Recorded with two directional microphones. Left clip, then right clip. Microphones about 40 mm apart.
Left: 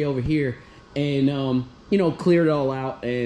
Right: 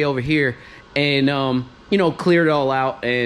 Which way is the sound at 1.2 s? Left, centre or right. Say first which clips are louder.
Right 5 dB; left.